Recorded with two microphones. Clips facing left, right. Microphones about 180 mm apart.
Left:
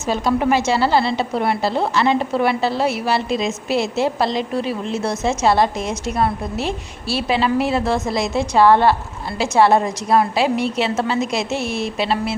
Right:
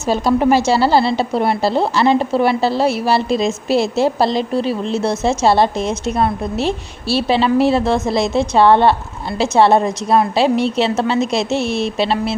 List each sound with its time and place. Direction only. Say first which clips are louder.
0.1 s a woman's voice: right 4 dB; 35° right (ahead or behind)